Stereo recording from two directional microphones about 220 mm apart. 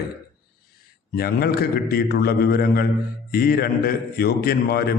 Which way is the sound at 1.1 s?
45° left (ahead or behind).